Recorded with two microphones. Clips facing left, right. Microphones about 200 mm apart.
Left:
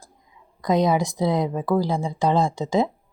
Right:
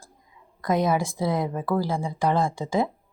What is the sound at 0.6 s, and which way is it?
Speech, 20° left (ahead or behind).